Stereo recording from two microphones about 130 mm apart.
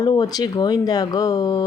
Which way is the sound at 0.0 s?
30° left (ahead or behind).